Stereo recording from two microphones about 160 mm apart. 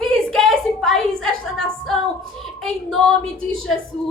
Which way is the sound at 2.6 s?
Centre (ahead or behind).